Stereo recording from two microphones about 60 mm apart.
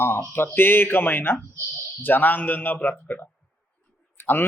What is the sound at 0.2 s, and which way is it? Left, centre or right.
Speech, left.